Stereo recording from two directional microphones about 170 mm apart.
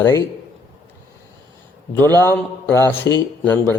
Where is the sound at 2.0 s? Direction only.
10° left (ahead or behind).